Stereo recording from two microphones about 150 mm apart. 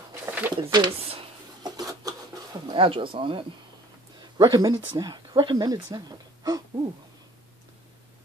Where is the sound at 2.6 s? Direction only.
35° right (ahead or behind).